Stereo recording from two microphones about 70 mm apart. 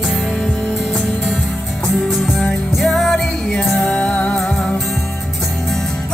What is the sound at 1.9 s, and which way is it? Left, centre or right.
Music, centre.